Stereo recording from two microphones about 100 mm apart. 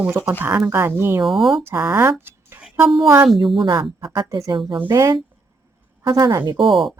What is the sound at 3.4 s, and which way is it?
Speech, 50° right (ahead or behind).